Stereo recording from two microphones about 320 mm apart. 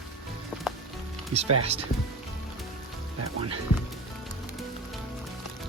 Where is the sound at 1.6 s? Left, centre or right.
Centre.